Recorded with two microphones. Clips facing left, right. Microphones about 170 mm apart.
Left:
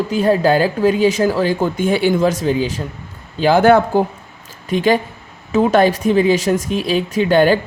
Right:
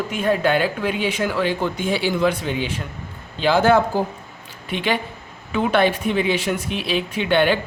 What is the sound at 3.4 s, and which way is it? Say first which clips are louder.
Speech: left 5 dB; 50° left (ahead or behind).